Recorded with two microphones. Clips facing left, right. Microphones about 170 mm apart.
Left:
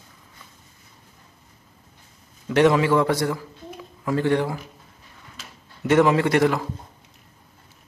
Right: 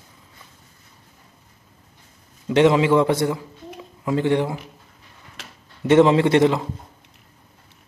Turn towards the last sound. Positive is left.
turn(degrees=-20)  # may be behind; listen again after turning